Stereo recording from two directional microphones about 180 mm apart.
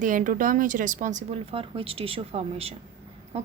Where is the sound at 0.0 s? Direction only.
50° right (ahead or behind).